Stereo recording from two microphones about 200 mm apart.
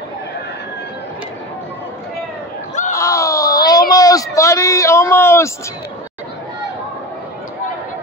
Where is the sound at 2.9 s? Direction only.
15° left (ahead or behind).